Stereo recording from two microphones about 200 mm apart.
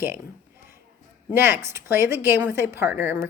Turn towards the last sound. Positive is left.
turn(degrees=-10)  # may be behind; listen again after turning